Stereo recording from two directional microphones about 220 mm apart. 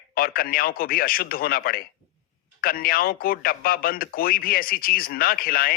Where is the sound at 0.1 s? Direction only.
40° left (ahead or behind).